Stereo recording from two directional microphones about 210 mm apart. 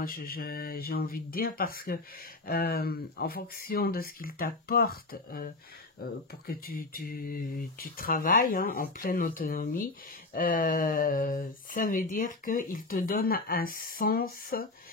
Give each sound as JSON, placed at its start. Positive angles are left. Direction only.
{"t": 0.0, "sound": "speech", "side_deg": 45}